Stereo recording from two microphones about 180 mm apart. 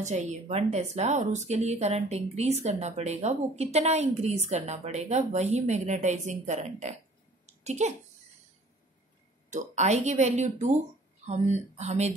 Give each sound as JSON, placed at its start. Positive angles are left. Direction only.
{"t": 0.0, "sound": "speech", "side_deg": -40}
{"t": 7.4, "sound": "a sound", "side_deg": -40}
{"t": 9.5, "sound": "speech", "side_deg": -40}